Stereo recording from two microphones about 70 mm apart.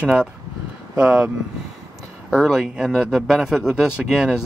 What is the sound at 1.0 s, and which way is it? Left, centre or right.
Speech, centre.